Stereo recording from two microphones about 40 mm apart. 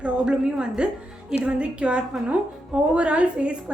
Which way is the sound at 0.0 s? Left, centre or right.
Right.